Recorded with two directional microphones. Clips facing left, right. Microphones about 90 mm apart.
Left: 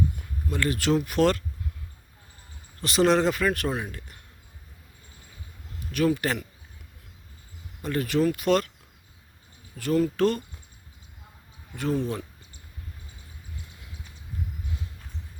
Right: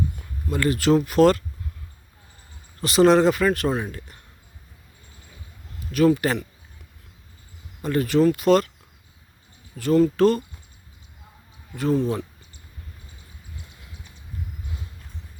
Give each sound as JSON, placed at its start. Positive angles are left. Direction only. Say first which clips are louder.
{"t": 0.5, "sound": "speech", "louder": "right 5 dB", "side_deg": 0}
{"t": 2.8, "sound": "speech", "louder": "right 5 dB", "side_deg": -5}
{"t": 3.7, "sound": "speech", "louder": "right 5 dB", "side_deg": -25}
{"t": 5.9, "sound": "speech", "louder": "right 5 dB", "side_deg": 0}
{"t": 7.8, "sound": "speech", "louder": "right 5 dB", "side_deg": 0}
{"t": 9.7, "sound": "speech", "louder": "right 5 dB", "side_deg": 0}
{"t": 11.8, "sound": "speech", "louder": "right 5 dB", "side_deg": 0}